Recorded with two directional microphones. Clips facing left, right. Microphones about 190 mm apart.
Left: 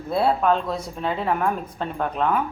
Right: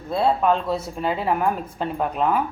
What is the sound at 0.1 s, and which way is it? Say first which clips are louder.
A woman's voice: even; 5° left (ahead or behind).